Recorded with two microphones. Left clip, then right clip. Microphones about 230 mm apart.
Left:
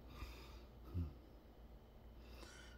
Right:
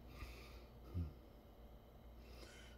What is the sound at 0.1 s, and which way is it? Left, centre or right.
Sniff, centre.